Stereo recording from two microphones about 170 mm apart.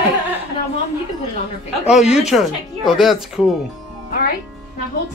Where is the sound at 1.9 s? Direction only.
40° left (ahead or behind).